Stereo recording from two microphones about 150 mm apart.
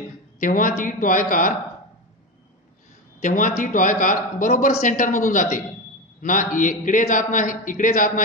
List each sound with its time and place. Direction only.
0.4 s a man's voice: 65° left (ahead or behind)
3.2 s a man's voice: 55° left (ahead or behind)